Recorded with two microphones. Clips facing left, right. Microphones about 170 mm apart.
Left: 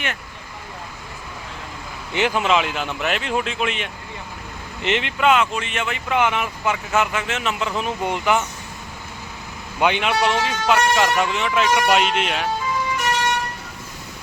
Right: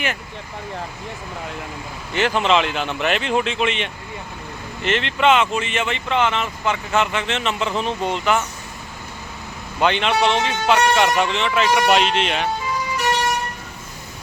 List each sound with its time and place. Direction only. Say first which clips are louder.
2.1 s speech: right 1 dB; 10° left (ahead or behind)
4.8 s speech: even; 15° left (ahead or behind)
5.2 s speech: right 2 dB; centre (ahead or behind); by 8.4 s 15° left (ahead or behind)
9.8 s speech: right 1 dB; 10° left (ahead or behind)
10.2 s speech: right 2 dB; 25° right (ahead or behind)
10.4 s speech: right 1 dB; 5° left (ahead or behind)